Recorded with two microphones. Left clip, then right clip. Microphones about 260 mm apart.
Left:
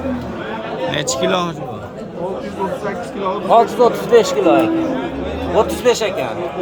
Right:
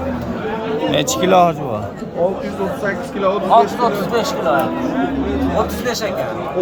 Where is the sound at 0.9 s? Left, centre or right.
Centre.